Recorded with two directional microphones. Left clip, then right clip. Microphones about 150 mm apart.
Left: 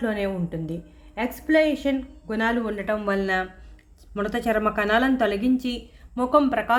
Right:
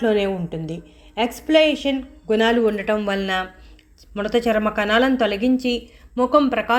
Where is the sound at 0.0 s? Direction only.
10° right (ahead or behind).